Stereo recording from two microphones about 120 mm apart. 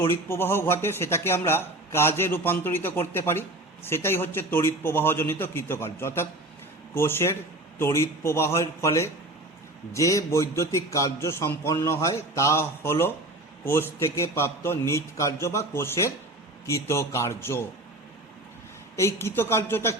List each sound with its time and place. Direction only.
0.3 s speech: 20° left (ahead or behind)
18.9 s speech: 20° left (ahead or behind)